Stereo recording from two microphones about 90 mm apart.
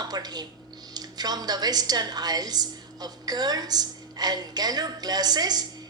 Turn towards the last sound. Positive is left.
turn(degrees=-50)  # may be behind; listen again after turning